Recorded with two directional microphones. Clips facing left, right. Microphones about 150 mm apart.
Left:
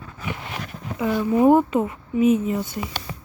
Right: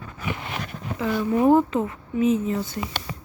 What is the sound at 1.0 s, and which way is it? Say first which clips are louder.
Speech: left 3 dB; 15° left (ahead or behind).